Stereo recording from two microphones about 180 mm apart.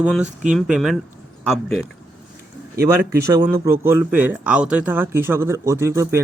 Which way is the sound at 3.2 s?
15° right (ahead or behind).